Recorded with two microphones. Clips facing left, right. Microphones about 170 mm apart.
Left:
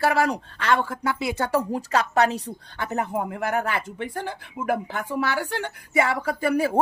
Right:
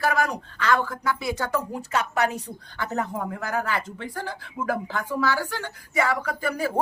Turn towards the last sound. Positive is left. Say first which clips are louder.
# left 2 dB
turn(degrees=25)  # may be behind; listen again after turning